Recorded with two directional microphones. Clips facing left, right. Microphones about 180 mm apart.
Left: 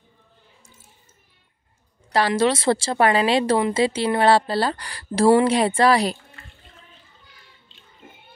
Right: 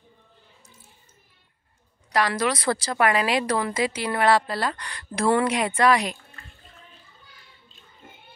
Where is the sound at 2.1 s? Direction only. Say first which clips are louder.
Left 4 dB; 30° left (ahead or behind).